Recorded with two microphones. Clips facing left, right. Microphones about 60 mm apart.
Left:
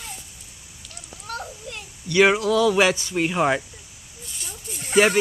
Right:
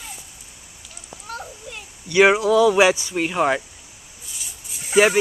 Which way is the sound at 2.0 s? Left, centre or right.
Centre.